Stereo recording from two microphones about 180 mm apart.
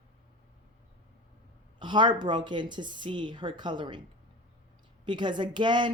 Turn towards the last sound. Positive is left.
turn(degrees=-25)  # may be behind; listen again after turning